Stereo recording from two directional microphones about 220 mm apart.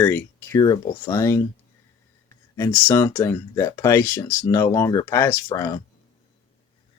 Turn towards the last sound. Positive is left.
turn(degrees=15)  # may be behind; listen again after turning